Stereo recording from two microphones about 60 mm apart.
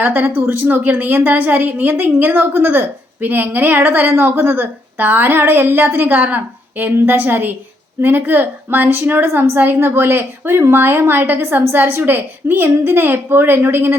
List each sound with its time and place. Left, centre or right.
0.0 s a woman's voice: right